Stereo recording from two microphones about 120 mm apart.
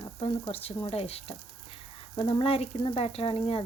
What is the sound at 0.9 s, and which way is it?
Frying, 55° left (ahead or behind).